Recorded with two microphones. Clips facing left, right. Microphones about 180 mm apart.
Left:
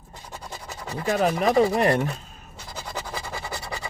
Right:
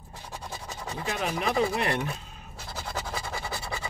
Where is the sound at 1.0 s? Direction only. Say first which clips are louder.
Left 8 dB; 40° left (ahead or behind).